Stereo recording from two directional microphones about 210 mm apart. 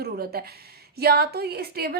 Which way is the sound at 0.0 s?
45° right (ahead or behind).